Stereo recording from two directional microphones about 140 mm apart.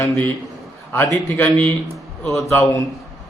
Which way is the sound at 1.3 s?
10° left (ahead or behind).